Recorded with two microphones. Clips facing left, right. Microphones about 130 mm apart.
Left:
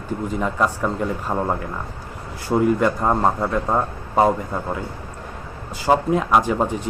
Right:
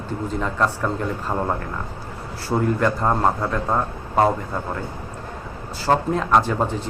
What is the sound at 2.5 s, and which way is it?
A man's voice, 10° left (ahead or behind).